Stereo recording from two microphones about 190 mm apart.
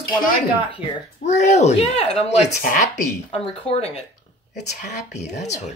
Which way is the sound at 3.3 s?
30° left (ahead or behind).